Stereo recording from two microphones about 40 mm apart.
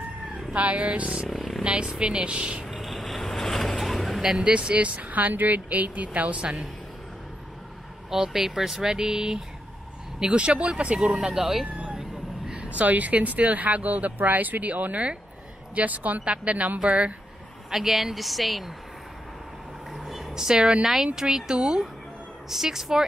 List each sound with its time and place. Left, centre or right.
0.5 s speech: right
1.3 s a sound: centre
1.6 s a woman's voice: right
2.7 s vehicle: centre
4.4 s speech: right
8.1 s speech: centre
10.2 s speech: right; by 11.6 s centre
11.9 s a sound: centre
12.5 s speech: right
16.2 s speech: right
17.6 s a woman's voice: centre
19.9 s a sound: centre
20.8 s speech: centre